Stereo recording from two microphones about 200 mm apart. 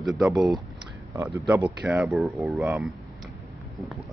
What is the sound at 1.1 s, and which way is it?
Speech, 15° right (ahead or behind).